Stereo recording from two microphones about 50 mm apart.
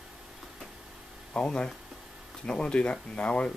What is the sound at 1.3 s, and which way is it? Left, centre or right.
Speech, centre.